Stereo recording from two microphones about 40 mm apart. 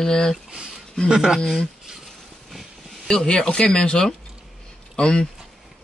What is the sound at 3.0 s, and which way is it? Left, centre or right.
Speech, centre.